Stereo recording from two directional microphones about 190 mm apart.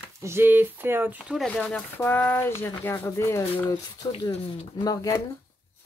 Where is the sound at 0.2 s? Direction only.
10° right (ahead or behind); by 4.2 s 20° left (ahead or behind).